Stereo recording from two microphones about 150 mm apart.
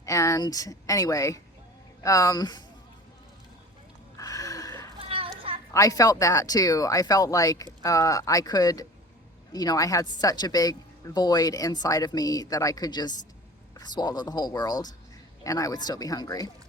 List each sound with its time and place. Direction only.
0.0 s a woman's voice: 20° left (ahead or behind)
4.2 s a sound: 20° left (ahead or behind)
4.9 s children playing: 40° right (ahead or behind)
5.7 s a woman's voice: 20° left (ahead or behind)